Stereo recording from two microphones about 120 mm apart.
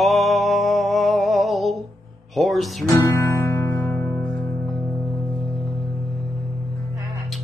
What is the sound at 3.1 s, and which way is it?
Music, 25° left (ahead or behind).